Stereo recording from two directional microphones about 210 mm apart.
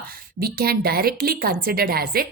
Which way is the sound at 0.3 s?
45° right (ahead or behind).